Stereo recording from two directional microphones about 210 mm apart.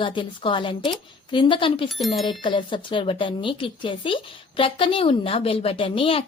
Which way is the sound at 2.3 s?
25° left (ahead or behind).